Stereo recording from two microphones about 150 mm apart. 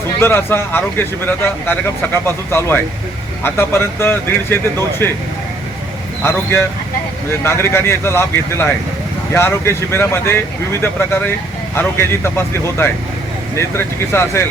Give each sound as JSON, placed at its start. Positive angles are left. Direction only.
{"t": 0.2, "sound": "speech", "side_deg": 15}
{"t": 6.2, "sound": "speech", "side_deg": 15}